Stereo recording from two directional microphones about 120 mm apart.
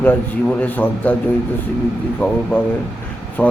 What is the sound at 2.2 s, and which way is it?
Speech, 15° left (ahead or behind).